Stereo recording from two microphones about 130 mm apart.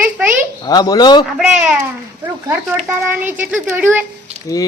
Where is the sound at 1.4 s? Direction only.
5° right (ahead or behind).